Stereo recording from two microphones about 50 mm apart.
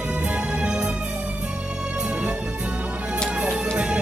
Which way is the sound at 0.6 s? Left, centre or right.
Centre.